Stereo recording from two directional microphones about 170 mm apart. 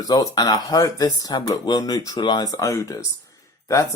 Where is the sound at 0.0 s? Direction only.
25° left (ahead or behind).